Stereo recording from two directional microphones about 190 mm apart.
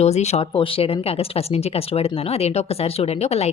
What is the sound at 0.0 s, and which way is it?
Speech, 35° left (ahead or behind).